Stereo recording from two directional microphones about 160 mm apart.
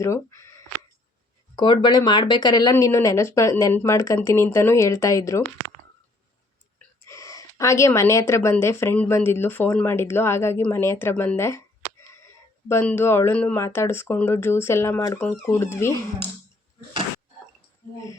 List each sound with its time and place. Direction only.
0.0 s speech: 20° left (ahead or behind)
1.5 s speech: 25° left (ahead or behind)
7.0 s speech: 20° left (ahead or behind)
12.6 s speech: 10° left (ahead or behind)